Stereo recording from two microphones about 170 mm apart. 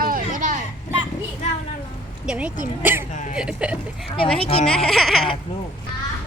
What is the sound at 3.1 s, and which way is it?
Speech, 45° left (ahead or behind).